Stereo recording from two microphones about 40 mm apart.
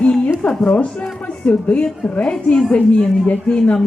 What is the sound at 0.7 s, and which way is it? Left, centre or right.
A woman's voice, left.